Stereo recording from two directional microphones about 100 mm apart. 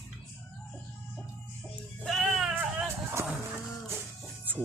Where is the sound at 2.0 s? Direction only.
Centre (ahead or behind).